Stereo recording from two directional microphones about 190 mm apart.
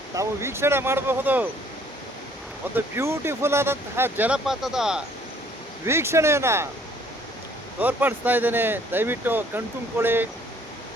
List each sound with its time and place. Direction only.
0.1 s speech: 15° right (ahead or behind)
2.7 s speech: 15° right (ahead or behind)
5.8 s speech: 15° right (ahead or behind)
7.8 s speech: 10° right (ahead or behind)